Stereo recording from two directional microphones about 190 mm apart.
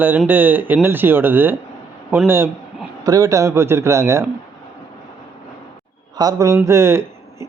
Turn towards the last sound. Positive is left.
turn(degrees=-15)  # may be behind; listen again after turning